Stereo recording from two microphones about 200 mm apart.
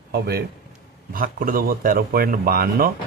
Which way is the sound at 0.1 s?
50° right (ahead or behind).